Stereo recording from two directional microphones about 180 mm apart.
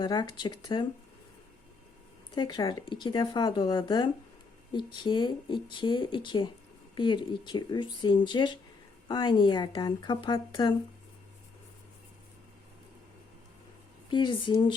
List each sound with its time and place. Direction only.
0.0 s speech: 25° left (ahead or behind)
2.3 s speech: 25° left (ahead or behind)
14.1 s speech: 25° left (ahead or behind)